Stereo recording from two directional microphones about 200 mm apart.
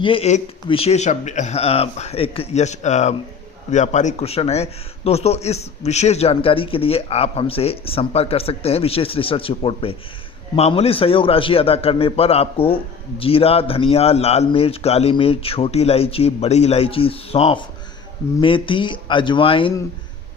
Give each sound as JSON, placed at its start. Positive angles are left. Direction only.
{"t": 0.0, "sound": "a man's voice", "side_deg": 30}